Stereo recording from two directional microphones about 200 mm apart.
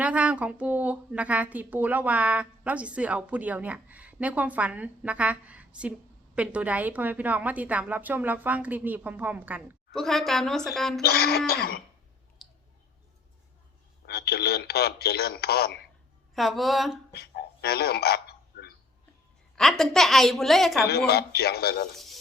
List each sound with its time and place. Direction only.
0.0 s a woman's voice: 5° right (ahead or behind)
11.0 s a man's voice: 50° left (ahead or behind)
14.1 s a man's voice: 55° left (ahead or behind)
16.3 s a woman's voice: centre (ahead or behind)
17.1 s a sound: 55° left (ahead or behind)
19.5 s a woman's voice: centre (ahead or behind)
21.1 s a man's voice: 55° left (ahead or behind)
21.9 s a sound: centre (ahead or behind)